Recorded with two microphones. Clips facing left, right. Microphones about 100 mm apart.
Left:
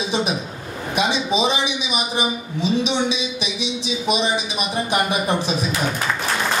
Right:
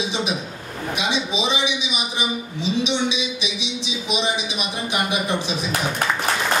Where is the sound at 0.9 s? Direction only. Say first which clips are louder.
Left 4 dB; 45° left (ahead or behind).